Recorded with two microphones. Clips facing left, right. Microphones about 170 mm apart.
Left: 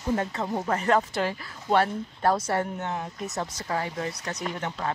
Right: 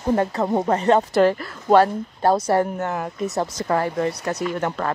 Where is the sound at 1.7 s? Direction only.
35° right (ahead or behind).